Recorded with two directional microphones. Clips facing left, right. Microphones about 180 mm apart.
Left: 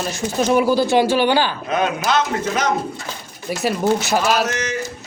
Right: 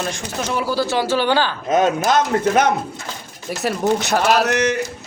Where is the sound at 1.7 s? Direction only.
45° right (ahead or behind).